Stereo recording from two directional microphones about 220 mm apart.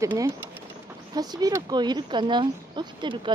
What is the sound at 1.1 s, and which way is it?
Speech, 20° right (ahead or behind).